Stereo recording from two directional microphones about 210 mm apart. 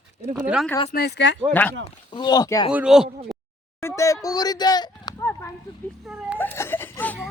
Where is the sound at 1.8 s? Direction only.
20° left (ahead or behind).